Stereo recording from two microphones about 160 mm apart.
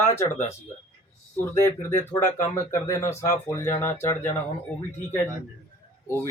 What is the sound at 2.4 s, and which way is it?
Speech, 15° left (ahead or behind).